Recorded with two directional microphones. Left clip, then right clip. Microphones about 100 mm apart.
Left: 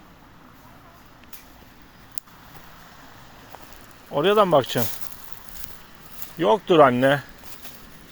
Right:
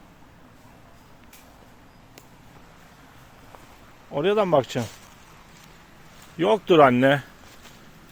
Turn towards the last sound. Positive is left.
turn(degrees=-90)